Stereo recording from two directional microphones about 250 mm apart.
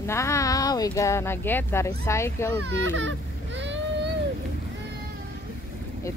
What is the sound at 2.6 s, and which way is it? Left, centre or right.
Baby cry, right.